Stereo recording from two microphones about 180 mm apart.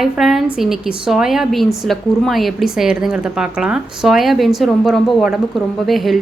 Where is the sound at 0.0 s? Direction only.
Centre (ahead or behind).